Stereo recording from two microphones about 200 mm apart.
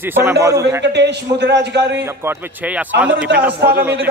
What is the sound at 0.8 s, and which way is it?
A man's voice, 60° right (ahead or behind).